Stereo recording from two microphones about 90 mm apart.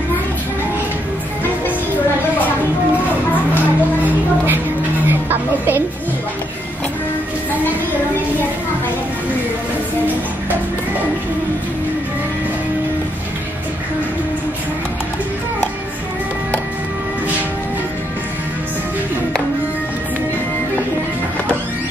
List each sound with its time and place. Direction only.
5.0 s music: 20° right (ahead or behind)